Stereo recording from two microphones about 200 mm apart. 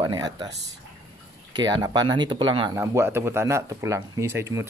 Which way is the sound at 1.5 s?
20° right (ahead or behind).